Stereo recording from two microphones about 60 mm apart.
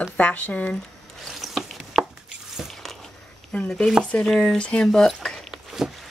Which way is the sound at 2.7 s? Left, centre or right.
Centre.